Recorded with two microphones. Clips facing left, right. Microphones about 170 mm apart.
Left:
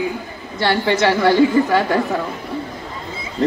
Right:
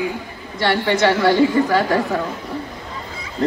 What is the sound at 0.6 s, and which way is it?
A woman's voice, 25° left (ahead or behind).